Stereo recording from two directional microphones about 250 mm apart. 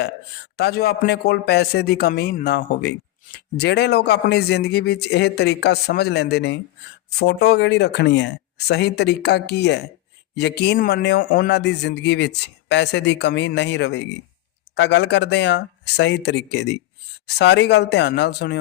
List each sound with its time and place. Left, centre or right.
0.5 s a man's voice: left